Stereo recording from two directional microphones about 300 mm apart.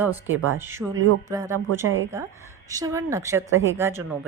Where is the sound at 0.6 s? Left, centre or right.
Centre.